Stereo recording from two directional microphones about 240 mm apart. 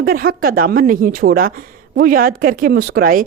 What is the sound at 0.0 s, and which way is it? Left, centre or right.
A woman's voice, right.